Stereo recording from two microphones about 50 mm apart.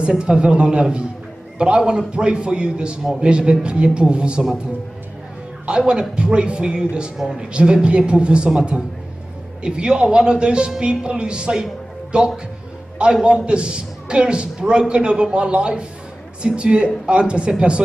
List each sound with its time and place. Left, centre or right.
0.2 s a man's voice: centre
5.7 s a man's voice: centre